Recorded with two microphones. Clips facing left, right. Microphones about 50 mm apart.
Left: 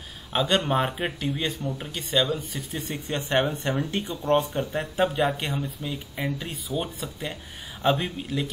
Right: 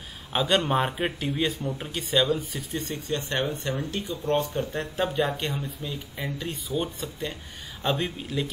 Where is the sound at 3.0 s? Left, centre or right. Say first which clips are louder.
Left 5 dB; left.